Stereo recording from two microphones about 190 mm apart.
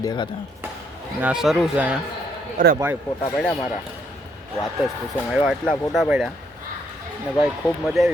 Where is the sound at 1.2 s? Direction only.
5° right (ahead or behind).